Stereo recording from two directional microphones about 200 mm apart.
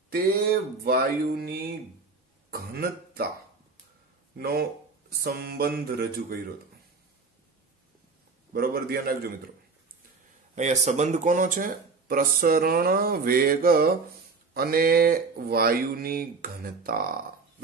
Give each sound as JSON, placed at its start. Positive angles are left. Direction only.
{"t": 0.1, "sound": "speech", "side_deg": -50}
{"t": 4.4, "sound": "speech", "side_deg": -50}
{"t": 8.5, "sound": "speech", "side_deg": -50}
{"t": 10.5, "sound": "speech", "side_deg": -35}